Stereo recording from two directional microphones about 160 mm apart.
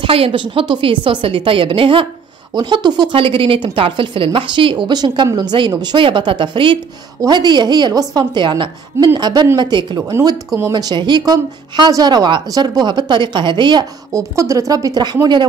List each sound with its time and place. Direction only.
0.0 s speech: 35° right (ahead or behind)